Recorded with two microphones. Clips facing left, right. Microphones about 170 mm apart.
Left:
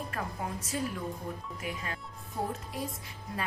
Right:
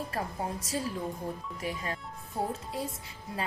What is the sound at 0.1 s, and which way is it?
Speech, 30° right (ahead or behind).